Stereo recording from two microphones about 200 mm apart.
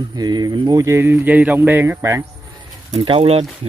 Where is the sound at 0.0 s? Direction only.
20° right (ahead or behind).